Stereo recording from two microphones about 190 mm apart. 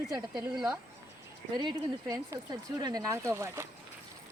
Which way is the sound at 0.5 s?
5° right (ahead or behind).